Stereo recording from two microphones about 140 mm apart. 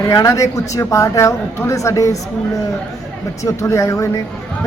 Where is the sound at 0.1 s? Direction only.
20° left (ahead or behind).